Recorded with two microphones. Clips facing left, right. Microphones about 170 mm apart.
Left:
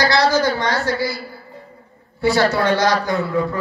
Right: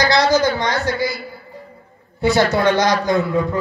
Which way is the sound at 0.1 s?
20° right (ahead or behind).